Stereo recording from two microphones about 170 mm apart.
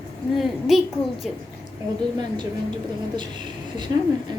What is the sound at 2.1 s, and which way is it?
Speech, 25° right (ahead or behind).